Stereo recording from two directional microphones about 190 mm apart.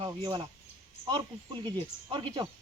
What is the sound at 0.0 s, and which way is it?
Speech, 20° right (ahead or behind).